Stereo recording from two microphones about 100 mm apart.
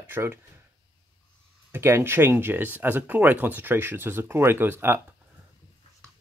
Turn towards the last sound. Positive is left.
turn(degrees=-20)  # may be behind; listen again after turning